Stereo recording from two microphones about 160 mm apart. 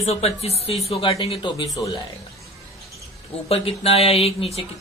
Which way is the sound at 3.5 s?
40° left (ahead or behind).